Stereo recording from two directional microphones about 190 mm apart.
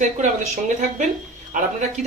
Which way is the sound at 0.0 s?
40° right (ahead or behind).